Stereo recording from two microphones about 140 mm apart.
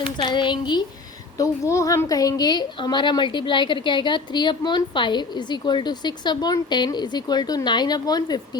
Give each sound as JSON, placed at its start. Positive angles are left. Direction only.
{"t": 0.3, "sound": "a woman's voice", "side_deg": 35}
{"t": 1.4, "sound": "a woman's voice", "side_deg": 20}